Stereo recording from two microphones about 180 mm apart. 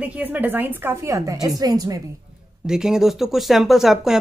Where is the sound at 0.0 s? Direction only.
10° right (ahead or behind).